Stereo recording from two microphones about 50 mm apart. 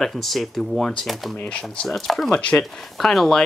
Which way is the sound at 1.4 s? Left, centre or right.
Centre.